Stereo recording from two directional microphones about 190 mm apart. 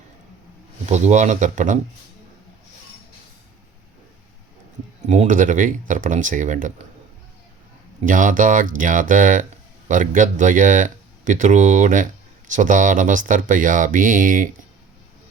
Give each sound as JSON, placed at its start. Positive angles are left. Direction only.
{"t": 0.9, "sound": "speech", "side_deg": -35}
{"t": 5.0, "sound": "speech", "side_deg": -40}
{"t": 8.0, "sound": "speech", "side_deg": -45}